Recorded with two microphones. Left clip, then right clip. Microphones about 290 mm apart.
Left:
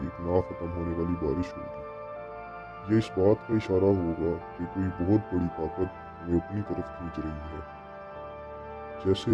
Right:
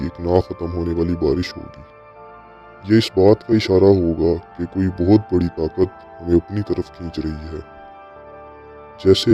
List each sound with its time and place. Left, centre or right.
0.0 s speech: right
2.8 s speech: right
9.0 s speech: right